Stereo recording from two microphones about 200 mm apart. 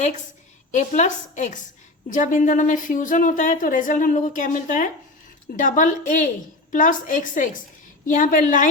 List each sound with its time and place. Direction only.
0.7 s speech: 40° left (ahead or behind)